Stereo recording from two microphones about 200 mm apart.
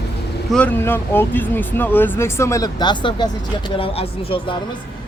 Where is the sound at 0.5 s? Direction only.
10° left (ahead or behind).